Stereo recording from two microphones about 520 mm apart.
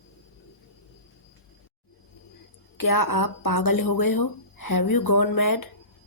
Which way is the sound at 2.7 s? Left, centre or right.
Left.